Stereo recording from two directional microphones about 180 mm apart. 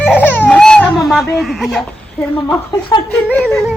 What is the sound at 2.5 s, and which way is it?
Speech, 25° left (ahead or behind).